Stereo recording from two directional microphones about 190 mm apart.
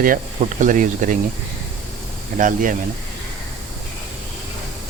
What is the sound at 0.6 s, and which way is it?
Speech, 40° right (ahead or behind).